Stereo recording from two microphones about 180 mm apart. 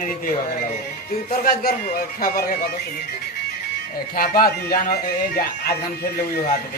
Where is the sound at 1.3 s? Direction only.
50° left (ahead or behind).